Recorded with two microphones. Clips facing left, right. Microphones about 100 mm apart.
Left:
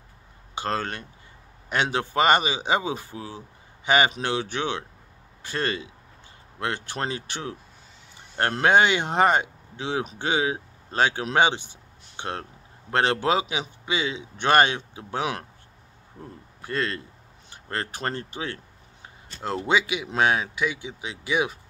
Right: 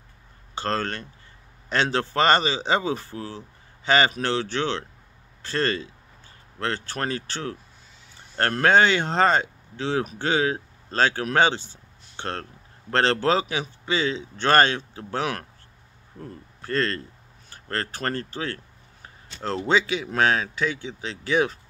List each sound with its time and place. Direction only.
0.6 s speech: 15° left (ahead or behind)